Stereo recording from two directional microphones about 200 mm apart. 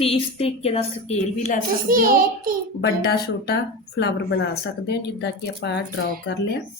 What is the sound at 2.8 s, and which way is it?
Speech, 55° left (ahead or behind).